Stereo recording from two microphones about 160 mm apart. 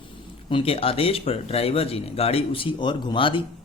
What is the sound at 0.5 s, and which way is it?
Speech, 35° left (ahead or behind).